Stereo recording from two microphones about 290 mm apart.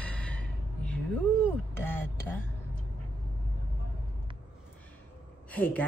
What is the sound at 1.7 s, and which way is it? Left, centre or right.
Speech, centre.